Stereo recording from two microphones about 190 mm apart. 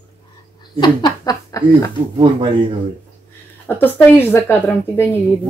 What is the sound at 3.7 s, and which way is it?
Speech, 10° left (ahead or behind).